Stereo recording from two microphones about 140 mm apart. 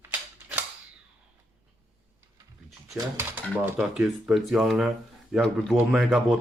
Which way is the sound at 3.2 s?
15° right (ahead or behind).